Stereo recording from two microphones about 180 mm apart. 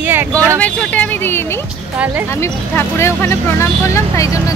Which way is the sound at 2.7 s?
15° left (ahead or behind).